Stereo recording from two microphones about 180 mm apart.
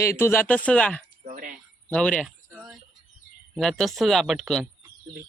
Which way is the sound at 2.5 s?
10° right (ahead or behind).